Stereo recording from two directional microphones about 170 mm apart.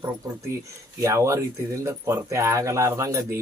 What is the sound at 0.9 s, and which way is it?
Speech, 15° right (ahead or behind).